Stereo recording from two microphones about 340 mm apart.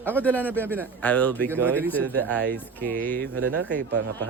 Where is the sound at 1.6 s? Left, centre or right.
Centre.